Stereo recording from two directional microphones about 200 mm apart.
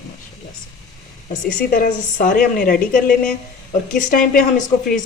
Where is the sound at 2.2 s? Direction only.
45° left (ahead or behind).